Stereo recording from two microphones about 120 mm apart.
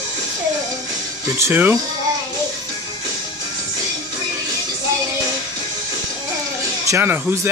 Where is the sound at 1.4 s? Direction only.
15° right (ahead or behind).